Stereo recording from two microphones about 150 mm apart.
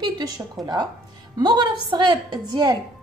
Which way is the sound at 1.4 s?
30° right (ahead or behind).